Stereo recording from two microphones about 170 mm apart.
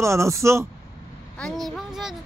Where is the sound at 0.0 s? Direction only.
15° right (ahead or behind).